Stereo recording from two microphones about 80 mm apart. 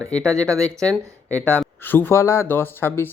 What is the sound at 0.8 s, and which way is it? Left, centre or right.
Speech, centre.